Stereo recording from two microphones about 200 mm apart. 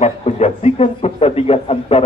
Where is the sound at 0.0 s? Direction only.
30° left (ahead or behind).